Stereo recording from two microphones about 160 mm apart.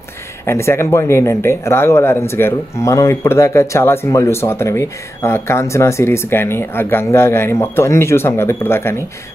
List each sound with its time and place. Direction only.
0.5 s speech: 15° left (ahead or behind)